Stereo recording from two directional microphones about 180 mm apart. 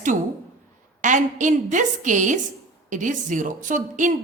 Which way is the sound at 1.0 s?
45° right (ahead or behind).